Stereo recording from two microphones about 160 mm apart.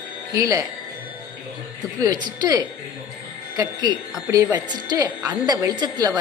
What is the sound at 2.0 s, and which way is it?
A woman's voice, 25° right (ahead or behind).